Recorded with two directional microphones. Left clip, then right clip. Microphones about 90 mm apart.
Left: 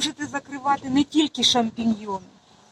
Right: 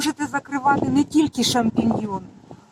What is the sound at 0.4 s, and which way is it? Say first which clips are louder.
Speech: right 4 dB; 30° right (ahead or behind).